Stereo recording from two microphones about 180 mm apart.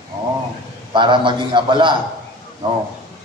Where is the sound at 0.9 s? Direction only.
25° right (ahead or behind).